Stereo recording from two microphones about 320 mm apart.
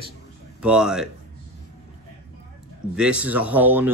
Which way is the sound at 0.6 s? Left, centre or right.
Centre.